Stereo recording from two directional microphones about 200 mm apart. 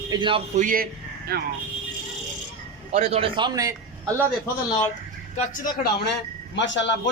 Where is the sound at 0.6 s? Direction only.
45° right (ahead or behind).